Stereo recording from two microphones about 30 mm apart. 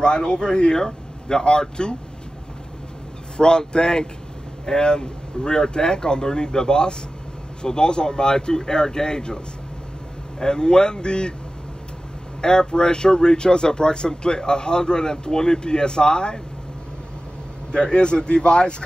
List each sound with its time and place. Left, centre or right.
0.0 s speech: left
3.3 s speech: left
10.4 s speech: left
12.4 s speech: left
17.6 s speech: left